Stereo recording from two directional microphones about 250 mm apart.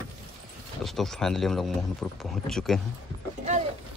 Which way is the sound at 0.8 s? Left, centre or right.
Centre.